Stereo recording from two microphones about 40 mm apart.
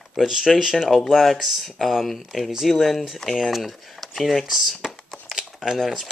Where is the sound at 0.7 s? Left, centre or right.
Centre.